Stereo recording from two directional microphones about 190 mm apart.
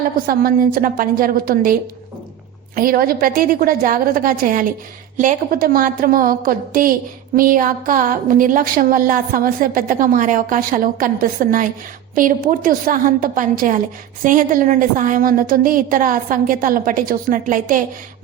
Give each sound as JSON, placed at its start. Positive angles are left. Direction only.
{"t": 0.3, "sound": "a woman's voice", "side_deg": -50}